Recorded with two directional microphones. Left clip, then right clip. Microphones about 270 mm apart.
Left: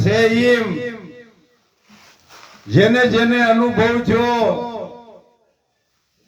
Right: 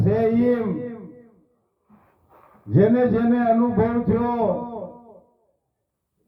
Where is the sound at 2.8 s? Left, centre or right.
Centre.